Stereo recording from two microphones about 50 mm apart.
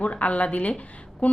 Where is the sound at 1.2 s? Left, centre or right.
Left.